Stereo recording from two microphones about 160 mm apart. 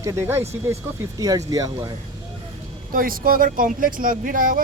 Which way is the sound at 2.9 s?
65° right (ahead or behind).